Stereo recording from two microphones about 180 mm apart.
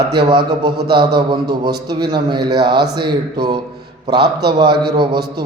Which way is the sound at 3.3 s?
25° right (ahead or behind).